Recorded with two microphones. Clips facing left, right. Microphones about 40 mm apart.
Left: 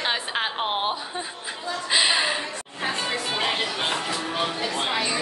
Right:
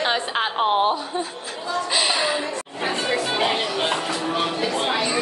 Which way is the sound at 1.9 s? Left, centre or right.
Centre.